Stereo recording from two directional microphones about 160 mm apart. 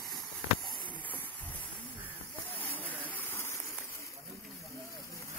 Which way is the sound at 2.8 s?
10° left (ahead or behind).